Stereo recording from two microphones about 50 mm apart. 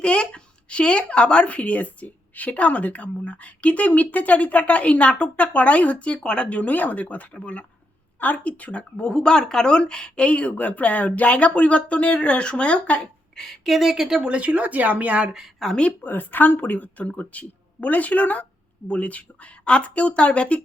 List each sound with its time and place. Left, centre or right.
0.0 s speech: left
13.3 s speech: centre
13.7 s speech: centre
14.3 s speech: right
15.6 s speech: centre
16.0 s speech: left